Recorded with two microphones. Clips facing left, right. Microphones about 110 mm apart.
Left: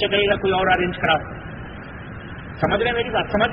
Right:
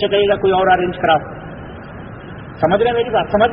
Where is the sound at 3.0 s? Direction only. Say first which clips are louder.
Right 6 dB; 35° right (ahead or behind).